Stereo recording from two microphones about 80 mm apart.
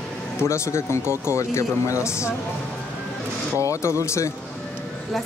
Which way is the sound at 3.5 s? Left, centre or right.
Left.